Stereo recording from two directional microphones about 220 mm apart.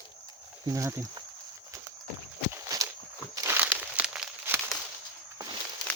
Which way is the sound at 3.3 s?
15° right (ahead or behind).